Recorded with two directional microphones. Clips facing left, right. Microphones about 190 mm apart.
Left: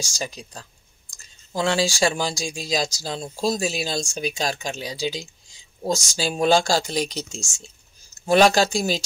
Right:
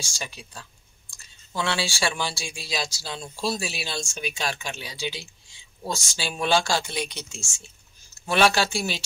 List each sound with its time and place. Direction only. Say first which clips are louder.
0.0 s speech: left 6 dB; 40° left (ahead or behind)